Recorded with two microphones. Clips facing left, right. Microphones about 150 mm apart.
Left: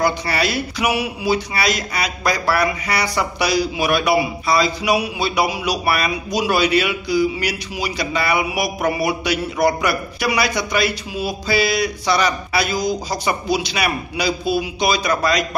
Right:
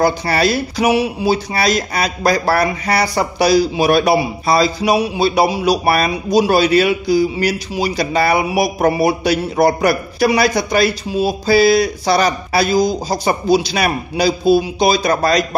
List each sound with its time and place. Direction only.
0.0 s speech: 35° right (ahead or behind)